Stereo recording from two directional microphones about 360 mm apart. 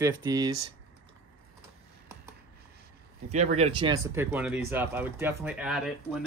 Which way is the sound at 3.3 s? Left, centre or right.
Centre.